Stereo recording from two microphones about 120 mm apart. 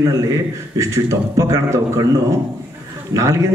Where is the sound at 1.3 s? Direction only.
25° right (ahead or behind).